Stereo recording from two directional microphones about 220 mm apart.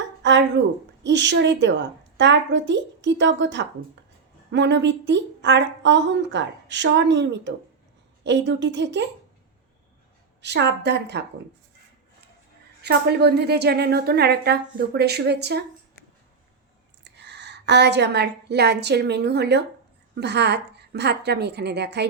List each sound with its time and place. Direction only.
0.2 s a sound: 50° right (ahead or behind)
1.0 s a woman's voice: 55° right (ahead or behind)
10.4 s a woman's voice: 50° right (ahead or behind)
12.8 s a woman's voice: 50° right (ahead or behind)
17.0 s a woman's voice: 50° right (ahead or behind)